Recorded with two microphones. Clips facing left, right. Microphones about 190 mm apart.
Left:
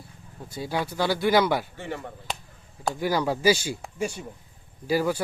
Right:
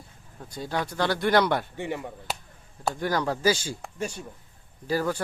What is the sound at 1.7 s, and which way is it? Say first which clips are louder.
Speech: right 2 dB; 15° right (ahead or behind).